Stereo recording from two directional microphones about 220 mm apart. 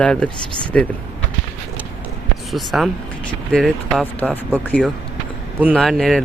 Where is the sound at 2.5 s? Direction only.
Centre (ahead or behind).